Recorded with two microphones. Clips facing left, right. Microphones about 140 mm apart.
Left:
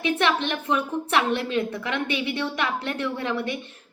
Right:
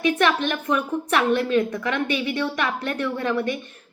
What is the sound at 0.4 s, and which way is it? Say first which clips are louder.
A woman's voice: right 2 dB; 25° left (ahead or behind).